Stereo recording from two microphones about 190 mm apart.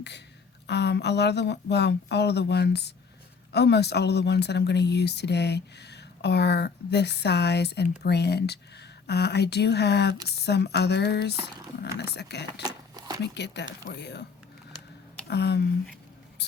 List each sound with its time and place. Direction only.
0.7 s speech: 65° left (ahead or behind)
12.6 s a sound: 20° right (ahead or behind)
13.2 s speech: 65° left (ahead or behind)
15.3 s speech: 60° left (ahead or behind)